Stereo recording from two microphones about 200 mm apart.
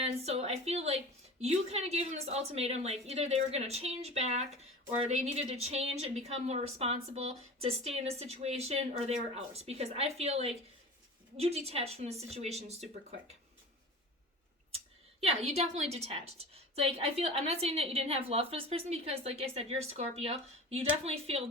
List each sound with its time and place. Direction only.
0.0 s a woman's voice: 30° right (ahead or behind)
15.2 s a woman's voice: 30° right (ahead or behind)